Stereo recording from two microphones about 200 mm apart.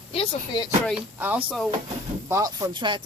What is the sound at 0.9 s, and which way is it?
Speech, 5° right (ahead or behind).